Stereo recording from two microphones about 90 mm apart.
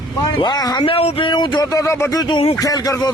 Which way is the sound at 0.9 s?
90° left.